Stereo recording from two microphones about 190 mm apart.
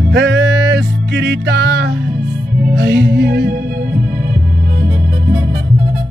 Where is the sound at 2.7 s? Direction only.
65° right (ahead or behind).